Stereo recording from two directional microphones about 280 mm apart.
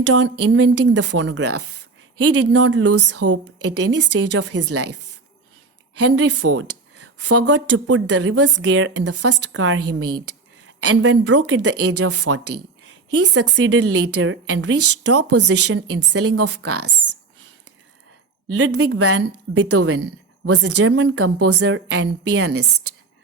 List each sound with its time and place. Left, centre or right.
0.0 s a woman's voice: right
6.0 s a woman's voice: right
18.5 s a woman's voice: right